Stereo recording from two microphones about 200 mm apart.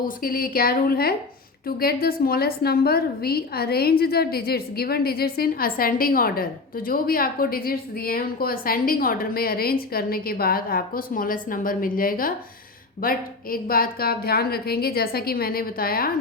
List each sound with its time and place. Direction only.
0.0 s a woman's voice: 45° left (ahead or behind)